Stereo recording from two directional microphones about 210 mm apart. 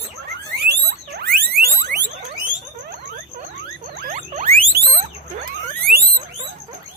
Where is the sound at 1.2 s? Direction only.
45° right (ahead or behind).